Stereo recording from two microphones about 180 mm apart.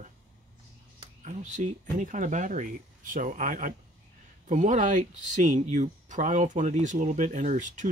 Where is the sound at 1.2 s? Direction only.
45° right (ahead or behind).